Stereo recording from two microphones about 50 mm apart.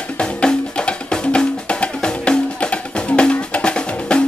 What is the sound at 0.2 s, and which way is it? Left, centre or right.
Music, centre.